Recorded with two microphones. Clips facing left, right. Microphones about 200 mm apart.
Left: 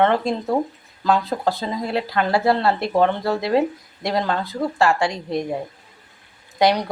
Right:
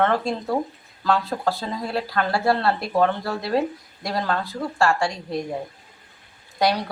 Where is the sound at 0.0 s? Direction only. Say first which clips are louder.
Left 3 dB; 20° left (ahead or behind).